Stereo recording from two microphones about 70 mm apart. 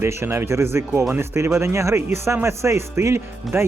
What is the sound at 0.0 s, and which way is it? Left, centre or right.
Speech, right.